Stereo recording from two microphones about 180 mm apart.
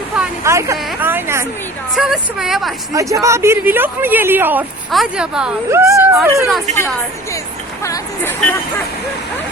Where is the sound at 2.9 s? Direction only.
20° right (ahead or behind).